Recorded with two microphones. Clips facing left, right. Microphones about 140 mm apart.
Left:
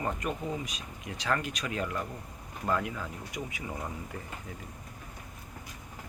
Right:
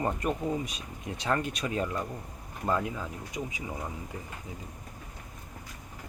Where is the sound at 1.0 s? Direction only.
25° right (ahead or behind).